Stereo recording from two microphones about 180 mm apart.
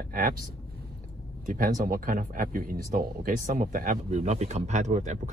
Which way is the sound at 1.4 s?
50° right (ahead or behind).